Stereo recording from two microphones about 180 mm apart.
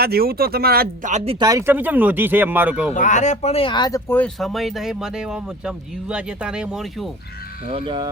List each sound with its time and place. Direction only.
0.0 s speech: 60° right (ahead or behind)
1.1 s speech: 35° right (ahead or behind)
1.5 s speech: 15° right (ahead or behind)
2.9 s speech: 45° left (ahead or behind); by 4.0 s 25° left (ahead or behind)
4.1 s speech: 5° left (ahead or behind)
7.7 s speech: 30° right (ahead or behind)